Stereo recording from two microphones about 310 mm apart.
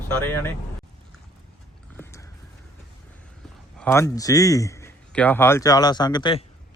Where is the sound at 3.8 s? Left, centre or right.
Centre.